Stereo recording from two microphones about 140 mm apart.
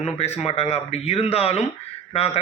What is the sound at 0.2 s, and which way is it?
A man's voice, 50° left (ahead or behind).